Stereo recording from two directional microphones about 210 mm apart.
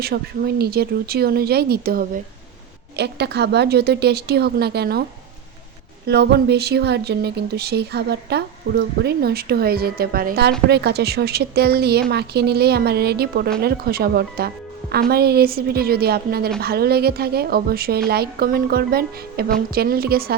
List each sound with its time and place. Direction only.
0.0 s speech: 50° right (ahead or behind)
6.1 s speech: 50° right (ahead or behind)